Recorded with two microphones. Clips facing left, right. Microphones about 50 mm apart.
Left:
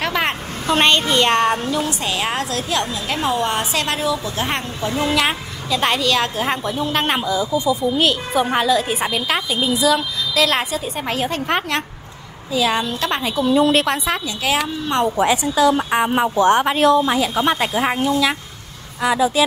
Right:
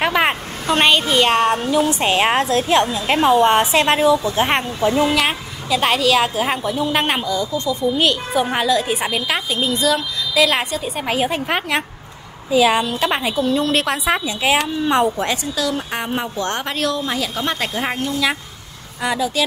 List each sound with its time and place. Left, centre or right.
0.0 s a sound: centre
0.7 s a woman's voice: centre
1.9 s a woman's voice: right
4.9 s a woman's voice: centre
13.4 s a woman's voice: centre
14.1 s a woman's voice: centre
15.4 s a woman's voice: left
19.1 s a woman's voice: centre